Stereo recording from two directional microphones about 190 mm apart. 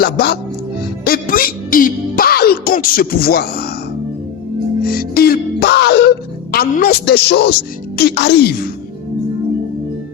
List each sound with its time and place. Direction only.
0.0 s speech: 55° left (ahead or behind)
1.0 s music: 50° left (ahead or behind)
4.9 s music: 55° left (ahead or behind)
7.9 s speech: 60° left (ahead or behind)